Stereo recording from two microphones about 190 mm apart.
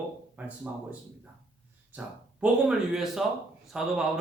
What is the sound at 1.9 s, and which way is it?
Speech, 5° right (ahead or behind).